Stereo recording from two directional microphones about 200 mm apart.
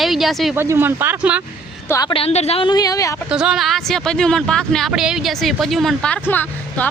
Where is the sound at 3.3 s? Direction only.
5° right (ahead or behind).